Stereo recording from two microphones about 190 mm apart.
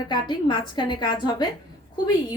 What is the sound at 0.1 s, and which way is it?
A woman's voice, 25° left (ahead or behind).